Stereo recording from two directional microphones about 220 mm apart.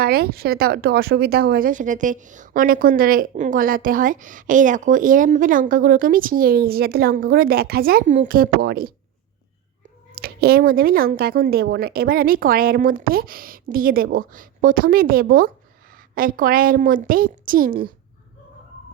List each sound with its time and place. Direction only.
0.0 s speech: 45° right (ahead or behind)
10.1 s speech: 40° right (ahead or behind)